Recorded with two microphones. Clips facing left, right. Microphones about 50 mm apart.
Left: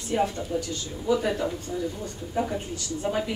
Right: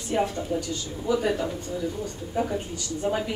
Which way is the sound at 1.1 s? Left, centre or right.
Centre.